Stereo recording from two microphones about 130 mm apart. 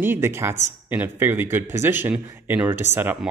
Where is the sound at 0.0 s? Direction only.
20° right (ahead or behind).